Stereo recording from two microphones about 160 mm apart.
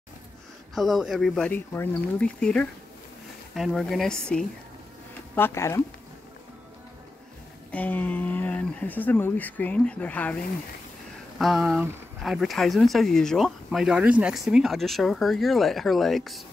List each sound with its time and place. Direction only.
0.7 s speech: centre (ahead or behind)
5.3 s speech: 15° left (ahead or behind)
7.7 s speech: 10° left (ahead or behind)
11.3 s speech: centre (ahead or behind)